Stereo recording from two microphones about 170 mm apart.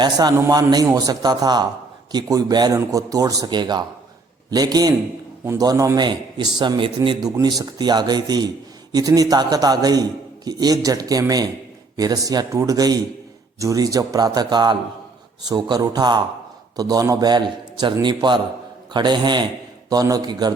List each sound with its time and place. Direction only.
0.0 s a man's voice: 25° right (ahead or behind)